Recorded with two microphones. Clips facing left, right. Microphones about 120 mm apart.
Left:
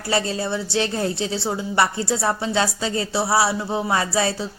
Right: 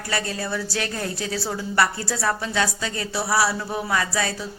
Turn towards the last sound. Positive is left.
turn(degrees=30)  # may be behind; listen again after turning